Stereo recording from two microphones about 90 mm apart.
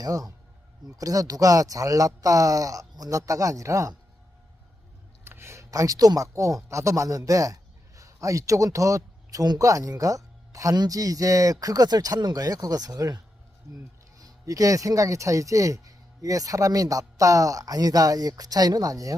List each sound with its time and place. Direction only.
0.0 s a man's voice: 40° right (ahead or behind)
5.2 s a man's voice: 25° right (ahead or behind); by 13.1 s 40° right (ahead or behind)
14.2 s a man's voice: 40° right (ahead or behind)